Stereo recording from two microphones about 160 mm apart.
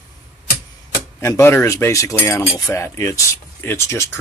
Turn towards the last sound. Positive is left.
turn(degrees=15)  # may be behind; listen again after turning